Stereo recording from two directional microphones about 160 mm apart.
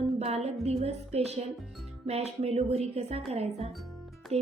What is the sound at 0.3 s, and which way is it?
Music, 40° right (ahead or behind).